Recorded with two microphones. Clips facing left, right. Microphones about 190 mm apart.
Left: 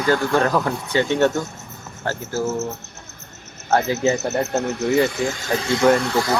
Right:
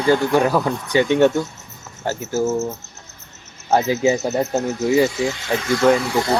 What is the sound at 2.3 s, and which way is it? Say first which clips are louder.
Speech: right 4 dB; 20° right (ahead or behind).